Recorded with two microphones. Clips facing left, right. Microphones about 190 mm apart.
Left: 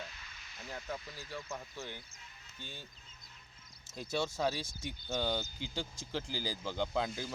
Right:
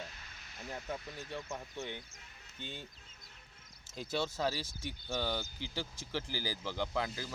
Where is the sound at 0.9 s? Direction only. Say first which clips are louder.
Right 1 dB; 25° right (ahead or behind).